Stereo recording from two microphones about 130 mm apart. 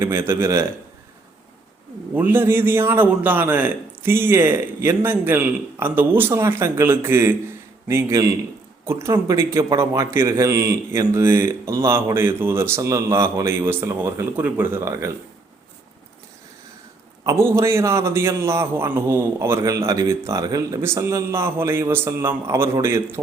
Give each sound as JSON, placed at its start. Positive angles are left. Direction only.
{"t": 0.0, "sound": "a man's voice", "side_deg": -20}
{"t": 2.1, "sound": "a man's voice", "side_deg": -15}
{"t": 17.2, "sound": "a man's voice", "side_deg": -20}